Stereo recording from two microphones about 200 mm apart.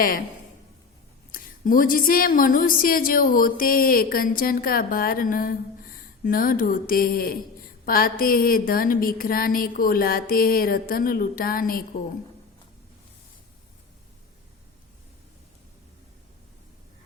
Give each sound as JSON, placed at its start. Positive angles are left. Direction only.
{"t": 1.3, "sound": "speech", "side_deg": 45}